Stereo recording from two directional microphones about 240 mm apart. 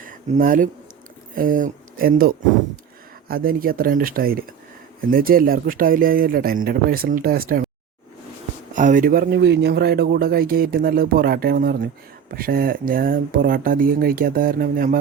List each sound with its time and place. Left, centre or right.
0.0 s speech: right
8.7 s speech: right